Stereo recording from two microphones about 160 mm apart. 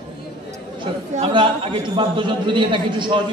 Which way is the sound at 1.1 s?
35° right (ahead or behind).